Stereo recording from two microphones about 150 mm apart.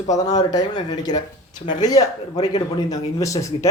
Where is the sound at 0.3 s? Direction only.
25° left (ahead or behind).